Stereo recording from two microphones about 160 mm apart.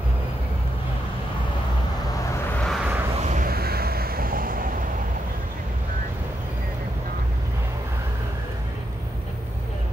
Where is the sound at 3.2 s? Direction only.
50° right (ahead or behind).